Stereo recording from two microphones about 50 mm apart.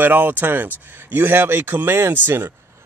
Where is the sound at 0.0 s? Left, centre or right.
Right.